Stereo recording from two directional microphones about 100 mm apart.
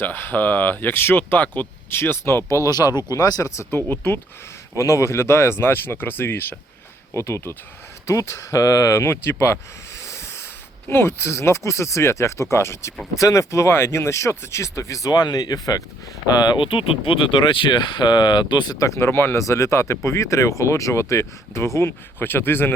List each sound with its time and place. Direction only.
0.0 s speech: 20° left (ahead or behind); by 15.8 s 40° left (ahead or behind)
16.4 s speech: 50° left (ahead or behind); by 22.7 s 20° left (ahead or behind)